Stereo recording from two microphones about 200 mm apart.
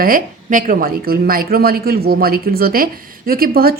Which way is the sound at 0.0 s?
45° right (ahead or behind).